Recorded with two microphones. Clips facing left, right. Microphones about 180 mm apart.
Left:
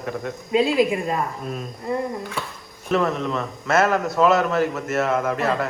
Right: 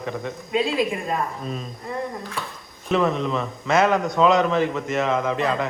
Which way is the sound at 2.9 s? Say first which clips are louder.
Even; centre (ahead or behind).